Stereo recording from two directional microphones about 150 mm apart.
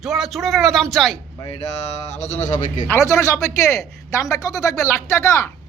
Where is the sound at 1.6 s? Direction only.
45° left (ahead or behind).